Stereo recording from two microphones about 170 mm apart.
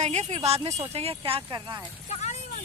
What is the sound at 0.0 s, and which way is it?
Speech, 45° right (ahead or behind).